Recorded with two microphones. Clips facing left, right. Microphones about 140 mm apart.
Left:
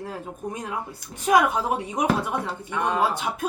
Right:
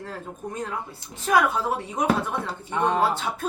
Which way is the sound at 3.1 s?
15° left (ahead or behind).